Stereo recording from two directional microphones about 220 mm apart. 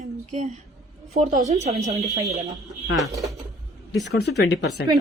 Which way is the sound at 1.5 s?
30° right (ahead or behind).